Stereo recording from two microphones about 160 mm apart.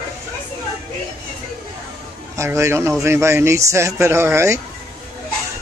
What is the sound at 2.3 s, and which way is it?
Speech, 20° right (ahead or behind).